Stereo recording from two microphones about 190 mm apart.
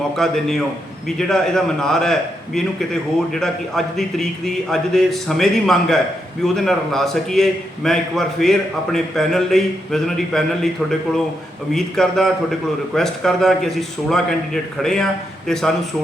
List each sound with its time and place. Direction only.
0.2 s a man's voice: centre (ahead or behind)
11.7 s a man's voice: centre (ahead or behind)